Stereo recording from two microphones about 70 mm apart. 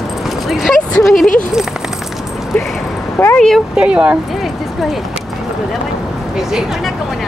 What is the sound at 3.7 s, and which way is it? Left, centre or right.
Speech, centre.